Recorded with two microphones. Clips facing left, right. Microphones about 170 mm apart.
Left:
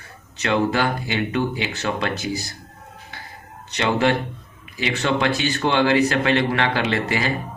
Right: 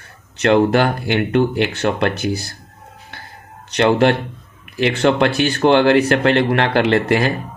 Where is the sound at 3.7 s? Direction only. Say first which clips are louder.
Right 6 dB; 65° right (ahead or behind).